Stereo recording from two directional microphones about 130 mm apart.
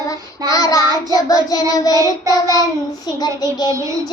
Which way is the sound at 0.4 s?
25° left (ahead or behind).